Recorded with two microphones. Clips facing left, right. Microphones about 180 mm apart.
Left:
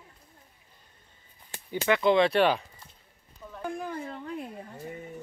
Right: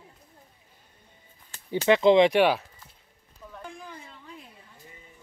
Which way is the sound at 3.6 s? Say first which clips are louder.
Left 9 dB; 55° left (ahead or behind).